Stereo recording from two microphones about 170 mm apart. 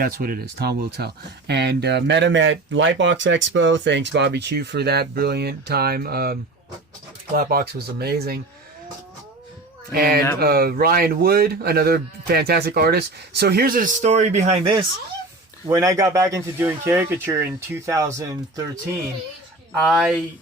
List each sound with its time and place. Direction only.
0.0 s speech: 60° right (ahead or behind)
7.3 s speech: 65° right (ahead or behind)
9.9 s speech: 65° right (ahead or behind); by 14.8 s 30° right (ahead or behind)
15.6 s speech: 20° right (ahead or behind)
19.8 s speech: centre (ahead or behind)